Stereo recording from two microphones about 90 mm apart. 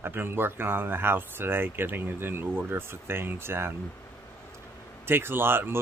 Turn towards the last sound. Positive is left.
turn(degrees=-25)  # may be behind; listen again after turning